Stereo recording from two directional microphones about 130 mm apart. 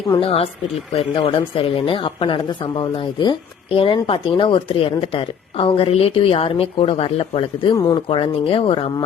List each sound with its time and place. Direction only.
0.2 s speech: 50° left (ahead or behind)
7.7 s speech: 30° left (ahead or behind)